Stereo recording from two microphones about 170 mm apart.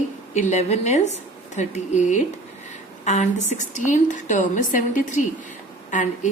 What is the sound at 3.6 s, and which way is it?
A woman's voice, 45° left (ahead or behind).